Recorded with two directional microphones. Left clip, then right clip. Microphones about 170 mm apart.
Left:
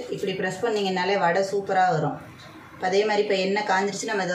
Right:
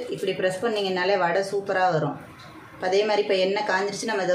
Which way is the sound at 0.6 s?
30° right (ahead or behind).